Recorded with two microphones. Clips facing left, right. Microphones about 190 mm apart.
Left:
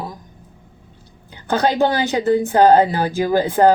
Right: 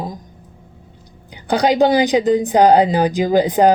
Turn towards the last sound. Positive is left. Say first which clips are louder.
# right 2 dB
turn(degrees=-15)  # may be behind; listen again after turning